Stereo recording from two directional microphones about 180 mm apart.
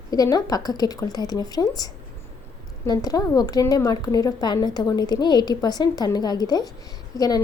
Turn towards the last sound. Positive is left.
turn(degrees=20)  # may be behind; listen again after turning